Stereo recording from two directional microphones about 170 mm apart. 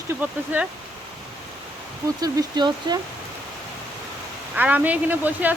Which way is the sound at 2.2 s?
25° right (ahead or behind).